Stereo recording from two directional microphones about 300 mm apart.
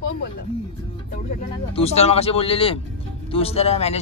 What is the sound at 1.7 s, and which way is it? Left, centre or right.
Speech, centre.